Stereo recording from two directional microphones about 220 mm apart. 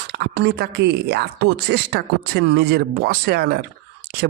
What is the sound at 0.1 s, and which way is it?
Speech, 50° right (ahead or behind).